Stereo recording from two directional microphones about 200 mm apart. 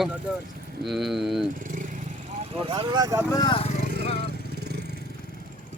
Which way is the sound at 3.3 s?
20° left (ahead or behind).